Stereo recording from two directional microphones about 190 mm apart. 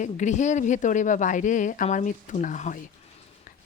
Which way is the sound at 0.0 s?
40° left (ahead or behind).